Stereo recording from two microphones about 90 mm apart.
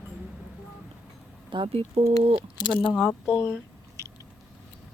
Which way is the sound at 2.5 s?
60° left (ahead or behind).